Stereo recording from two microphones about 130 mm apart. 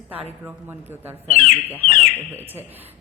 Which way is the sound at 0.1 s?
10° right (ahead or behind).